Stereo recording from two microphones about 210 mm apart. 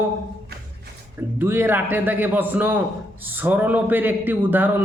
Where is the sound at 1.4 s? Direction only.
10° right (ahead or behind).